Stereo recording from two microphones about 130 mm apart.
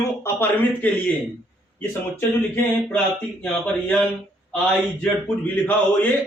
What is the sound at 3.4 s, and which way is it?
Speech, 10° left (ahead or behind).